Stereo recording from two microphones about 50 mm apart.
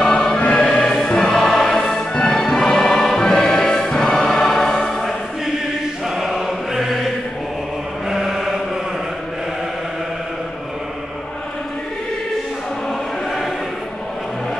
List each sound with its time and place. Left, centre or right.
0.0 s music: centre
6.0 s choir: centre
8.1 s chant: centre